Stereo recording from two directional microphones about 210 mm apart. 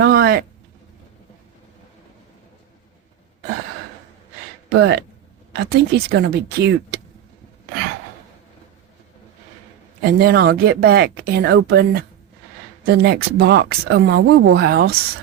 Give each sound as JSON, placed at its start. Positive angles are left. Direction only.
{"t": 0.0, "sound": "a sound", "side_deg": -45}
{"t": 4.8, "sound": "speech", "side_deg": -50}
{"t": 10.0, "sound": "speech", "side_deg": -45}